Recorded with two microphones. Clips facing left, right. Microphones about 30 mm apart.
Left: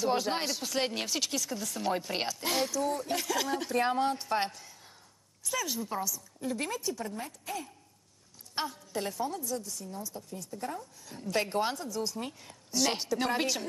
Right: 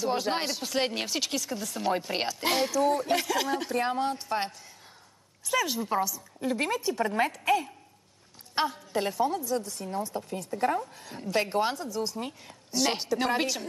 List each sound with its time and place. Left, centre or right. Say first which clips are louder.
0.2 s a woman's voice: right 2 dB; centre
3.3 s a woman's voice: right 3 dB; centre
3.7 s a woman's voice: left 2 dB; centre
5.5 s a woman's voice: right 6 dB; right
7.2 s a woman's voice: right 14 dB; right
8.5 s a woman's voice: right 6 dB; right
9.6 s speech: right 8 dB; right
11.2 s a woman's voice: right 3 dB; centre